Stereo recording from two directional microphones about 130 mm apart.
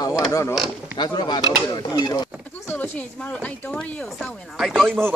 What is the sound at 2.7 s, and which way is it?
Speech, 10° left (ahead or behind).